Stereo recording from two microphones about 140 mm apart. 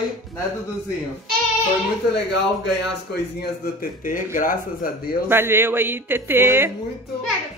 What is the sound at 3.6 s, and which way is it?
Speech, 85° left.